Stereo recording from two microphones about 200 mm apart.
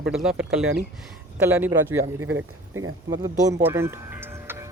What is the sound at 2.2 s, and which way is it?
Speech, 80° right.